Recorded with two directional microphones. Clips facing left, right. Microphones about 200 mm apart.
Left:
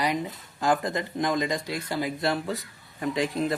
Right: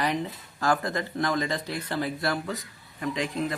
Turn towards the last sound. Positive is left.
turn(degrees=30)  # may be behind; listen again after turning